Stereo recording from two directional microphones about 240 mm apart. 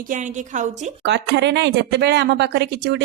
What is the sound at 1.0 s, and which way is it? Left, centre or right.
Speech, right.